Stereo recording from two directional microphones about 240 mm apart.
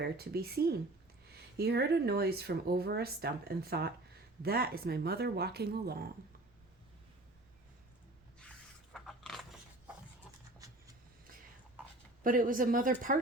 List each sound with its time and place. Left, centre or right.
0.0 s speech: right
8.4 s a sound: centre
10.6 s shuffling cards: centre
12.2 s speech: right